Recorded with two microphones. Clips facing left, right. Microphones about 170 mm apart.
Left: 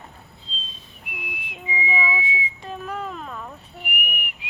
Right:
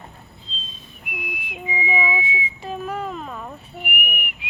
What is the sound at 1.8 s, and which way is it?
Whistling, 35° left (ahead or behind).